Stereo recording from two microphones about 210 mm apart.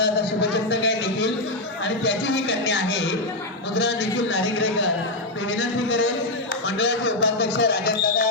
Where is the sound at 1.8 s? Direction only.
55° left (ahead or behind).